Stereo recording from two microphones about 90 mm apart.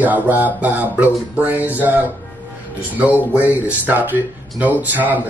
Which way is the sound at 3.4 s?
20° right (ahead or behind).